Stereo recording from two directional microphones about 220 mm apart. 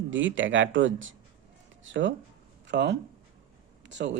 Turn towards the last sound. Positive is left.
turn(degrees=-55)  # may be behind; listen again after turning